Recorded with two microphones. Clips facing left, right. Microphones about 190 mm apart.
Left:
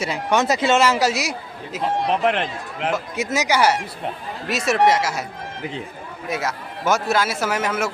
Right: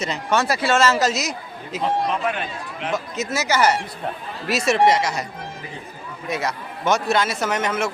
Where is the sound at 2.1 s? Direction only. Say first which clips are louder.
Left 4 dB; 70° left (ahead or behind).